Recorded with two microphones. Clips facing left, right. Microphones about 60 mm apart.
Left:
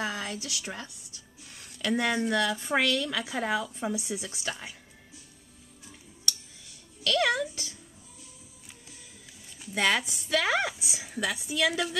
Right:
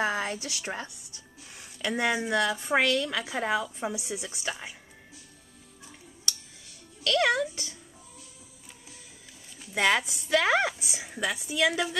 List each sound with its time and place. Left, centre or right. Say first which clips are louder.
0.0 s speech: right 4 dB; right
1.5 s speech: left 2 dB; centre
4.5 s speech: right 1 dB; centre
7.0 s speech: right 1 dB; centre
9.7 s speech: right 2 dB; centre
10.7 s speech: even; centre